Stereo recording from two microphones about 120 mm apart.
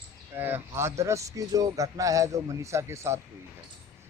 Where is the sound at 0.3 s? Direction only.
20° right (ahead or behind).